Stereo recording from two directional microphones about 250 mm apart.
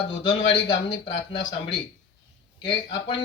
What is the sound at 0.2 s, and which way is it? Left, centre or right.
Speech, centre.